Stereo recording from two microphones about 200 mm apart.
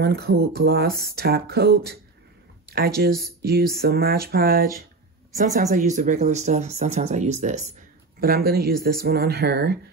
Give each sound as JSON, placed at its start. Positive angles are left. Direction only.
{"t": 0.0, "sound": "speech", "side_deg": -55}
{"t": 5.3, "sound": "speech", "side_deg": -35}
{"t": 8.2, "sound": "speech", "side_deg": -50}